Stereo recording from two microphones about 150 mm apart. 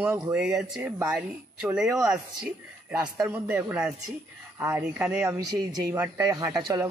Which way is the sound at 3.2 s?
15° right (ahead or behind).